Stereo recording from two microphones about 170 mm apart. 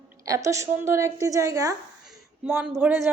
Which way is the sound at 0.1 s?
20° right (ahead or behind).